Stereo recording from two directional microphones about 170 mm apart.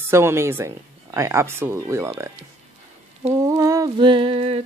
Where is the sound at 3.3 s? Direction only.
20° right (ahead or behind); by 4.6 s 35° right (ahead or behind).